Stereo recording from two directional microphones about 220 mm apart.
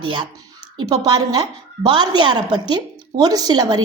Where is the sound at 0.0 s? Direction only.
20° right (ahead or behind).